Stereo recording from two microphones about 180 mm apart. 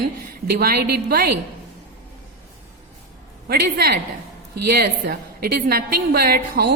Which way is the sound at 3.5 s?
60° right (ahead or behind).